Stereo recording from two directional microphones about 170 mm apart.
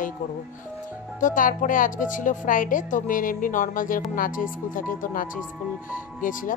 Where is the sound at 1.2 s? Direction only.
50° left (ahead or behind).